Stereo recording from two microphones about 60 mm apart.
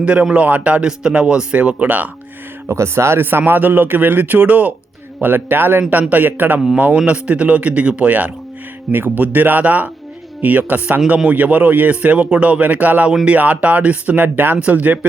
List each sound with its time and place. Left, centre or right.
0.0 s a man's voice: centre
2.6 s a man's voice: right